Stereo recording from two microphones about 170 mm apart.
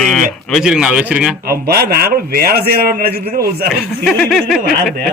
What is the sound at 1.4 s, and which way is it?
A man's voice, 65° right (ahead or behind).